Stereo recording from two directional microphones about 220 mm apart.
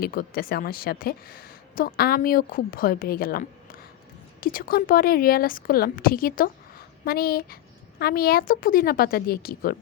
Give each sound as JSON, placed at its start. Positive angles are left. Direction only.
{"t": 0.0, "sound": "a woman's voice", "side_deg": 40}